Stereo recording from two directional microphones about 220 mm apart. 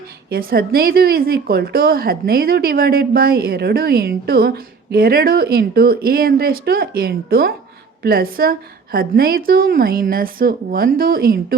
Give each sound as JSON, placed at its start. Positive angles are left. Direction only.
{"t": 0.3, "sound": "a woman's voice", "side_deg": -45}